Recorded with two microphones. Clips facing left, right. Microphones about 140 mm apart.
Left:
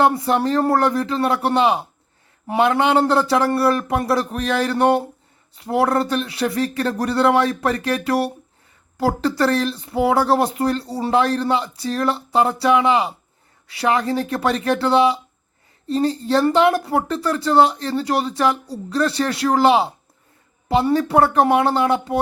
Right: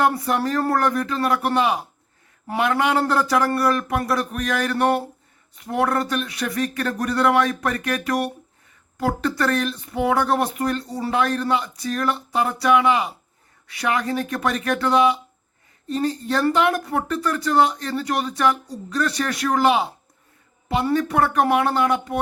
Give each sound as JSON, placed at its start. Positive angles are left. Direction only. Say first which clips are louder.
{"t": 0.0, "sound": "speech", "louder": "left 3 dB", "side_deg": 25}